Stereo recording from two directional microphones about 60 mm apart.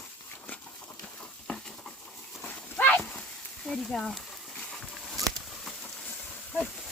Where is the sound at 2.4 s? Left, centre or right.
Left.